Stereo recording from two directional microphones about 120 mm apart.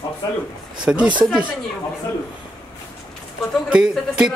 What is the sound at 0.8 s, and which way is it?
Speech, 5° right (ahead or behind).